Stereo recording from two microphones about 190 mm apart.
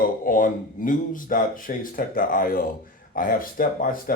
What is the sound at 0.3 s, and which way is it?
Speech, 45° left (ahead or behind).